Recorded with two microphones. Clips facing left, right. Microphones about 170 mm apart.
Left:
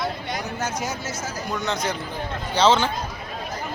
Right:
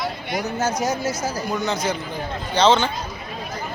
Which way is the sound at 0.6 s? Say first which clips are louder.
Right 8 dB; 40° right (ahead or behind).